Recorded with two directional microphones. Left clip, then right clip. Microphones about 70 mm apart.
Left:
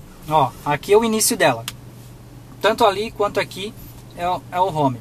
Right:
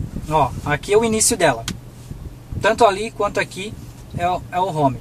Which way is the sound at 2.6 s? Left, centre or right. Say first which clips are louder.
Right 1 dB; left.